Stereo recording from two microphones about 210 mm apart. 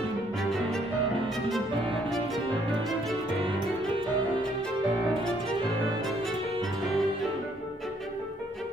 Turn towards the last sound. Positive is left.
turn(degrees=0)  # may be behind; listen again after turning